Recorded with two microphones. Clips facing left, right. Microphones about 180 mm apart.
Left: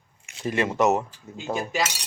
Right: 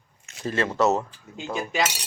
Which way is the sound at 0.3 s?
15° left (ahead or behind).